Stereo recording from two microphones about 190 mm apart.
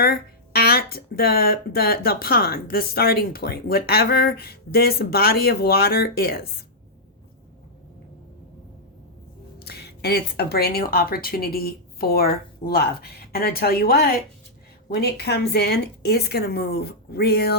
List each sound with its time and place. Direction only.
0.0 s speech: 55° left (ahead or behind)
9.6 s a woman's voice: 60° left (ahead or behind)